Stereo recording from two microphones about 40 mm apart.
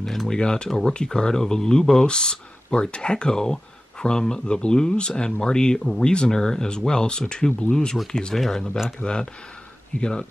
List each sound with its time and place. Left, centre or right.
0.0 s a sound: centre
0.4 s speech: left
9.0 s speech: centre